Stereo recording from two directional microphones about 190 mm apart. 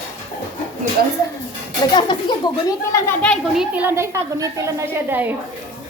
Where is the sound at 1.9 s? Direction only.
25° left (ahead or behind).